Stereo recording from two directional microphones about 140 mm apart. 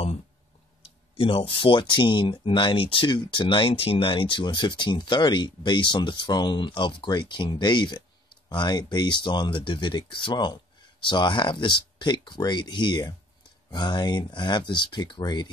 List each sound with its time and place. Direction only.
0.8 s speech: 40° left (ahead or behind)